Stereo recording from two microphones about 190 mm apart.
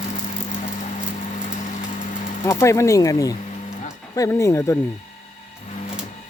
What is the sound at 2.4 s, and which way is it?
Speech, 15° left (ahead or behind).